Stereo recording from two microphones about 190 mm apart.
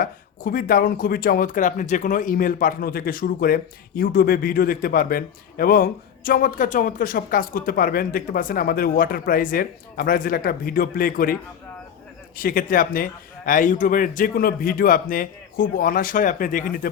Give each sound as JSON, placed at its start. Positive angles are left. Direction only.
{"t": 0.0, "sound": "speech", "side_deg": 50}
{"t": 12.4, "sound": "speech", "side_deg": 50}